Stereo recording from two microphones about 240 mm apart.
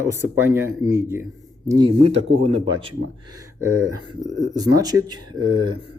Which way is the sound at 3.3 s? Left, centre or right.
Centre.